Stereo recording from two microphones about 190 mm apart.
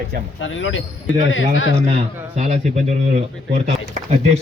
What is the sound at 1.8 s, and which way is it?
Speech, 35° right (ahead or behind).